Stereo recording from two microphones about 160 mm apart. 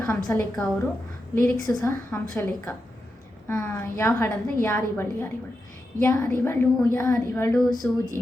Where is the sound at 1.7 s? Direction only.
15° left (ahead or behind).